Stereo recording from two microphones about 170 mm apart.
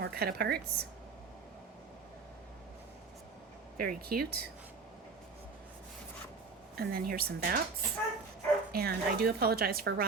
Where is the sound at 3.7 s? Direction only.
60° right (ahead or behind).